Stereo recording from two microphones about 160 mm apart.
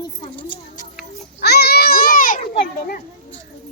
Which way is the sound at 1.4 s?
85° left.